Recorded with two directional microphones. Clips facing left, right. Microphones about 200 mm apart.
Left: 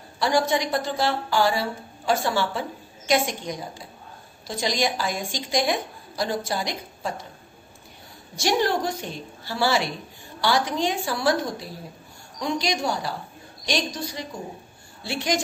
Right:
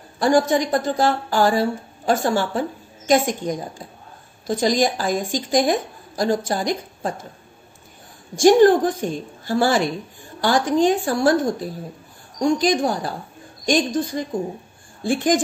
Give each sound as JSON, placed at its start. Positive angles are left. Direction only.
{"t": 0.2, "sound": "a woman's voice", "side_deg": -50}
{"t": 8.4, "sound": "a woman's voice", "side_deg": -50}